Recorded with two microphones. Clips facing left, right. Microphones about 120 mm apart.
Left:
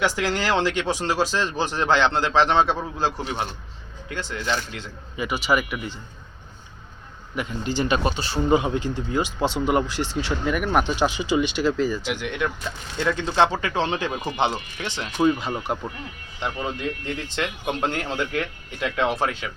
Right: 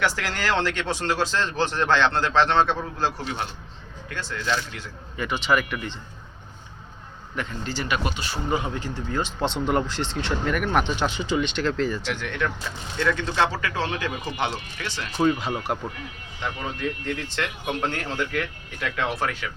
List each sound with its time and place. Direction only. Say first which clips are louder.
0.0 s speech: left 3 dB; 15° left (ahead or behind)
7.3 s speech: left 4 dB; 15° left (ahead or behind)
12.2 s speech: left 1 dB; 15° left (ahead or behind)
15.2 s speech: left 1 dB; centre (ahead or behind)
16.4 s speech: left 2 dB; 20° left (ahead or behind)